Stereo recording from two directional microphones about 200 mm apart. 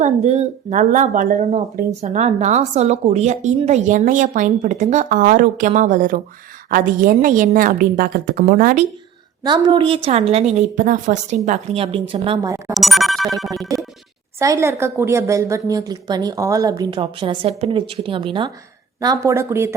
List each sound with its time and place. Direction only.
0.0 s a woman's voice: 35° right (ahead or behind)
9.4 s a woman's voice: 20° right (ahead or behind)
12.7 s music: centre (ahead or behind)
14.3 s a woman's voice: 15° right (ahead or behind)